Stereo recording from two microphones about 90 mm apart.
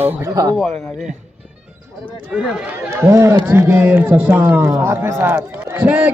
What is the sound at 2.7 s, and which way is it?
A man's voice, 25° right (ahead or behind).